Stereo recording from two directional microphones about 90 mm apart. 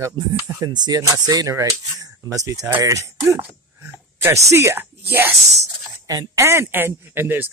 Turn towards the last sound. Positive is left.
turn(degrees=-20)  # may be behind; listen again after turning